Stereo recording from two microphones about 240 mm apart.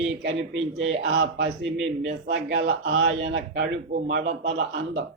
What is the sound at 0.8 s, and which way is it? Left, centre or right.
A man's voice, right.